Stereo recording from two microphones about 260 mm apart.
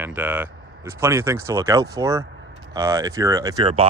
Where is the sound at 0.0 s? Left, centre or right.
Centre.